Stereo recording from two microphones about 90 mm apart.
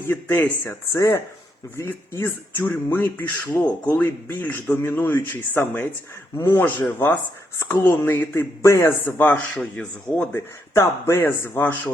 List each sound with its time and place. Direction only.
0.1 s speech: 25° left (ahead or behind)
0.9 s speech: 35° left (ahead or behind)
6.3 s speech: 35° left (ahead or behind)
6.7 s speech: 20° left (ahead or behind)
10.8 s speech: 30° left (ahead or behind)